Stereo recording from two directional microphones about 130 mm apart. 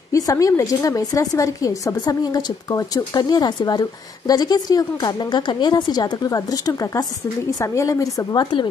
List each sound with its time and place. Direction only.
0.1 s a woman's voice: 25° left (ahead or behind)